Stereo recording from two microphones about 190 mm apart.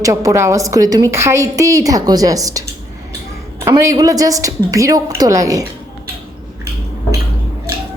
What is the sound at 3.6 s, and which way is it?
Speech, 15° right (ahead or behind).